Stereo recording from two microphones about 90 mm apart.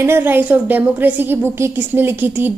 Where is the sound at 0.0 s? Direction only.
25° right (ahead or behind).